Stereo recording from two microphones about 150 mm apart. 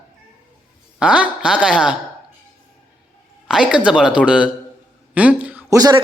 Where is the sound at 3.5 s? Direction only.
5° right (ahead or behind).